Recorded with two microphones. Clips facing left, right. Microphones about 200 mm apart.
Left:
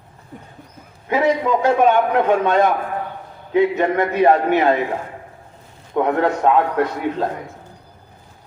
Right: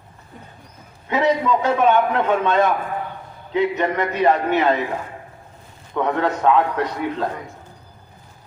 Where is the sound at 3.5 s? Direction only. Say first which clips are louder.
Left 4 dB; 50° left (ahead or behind).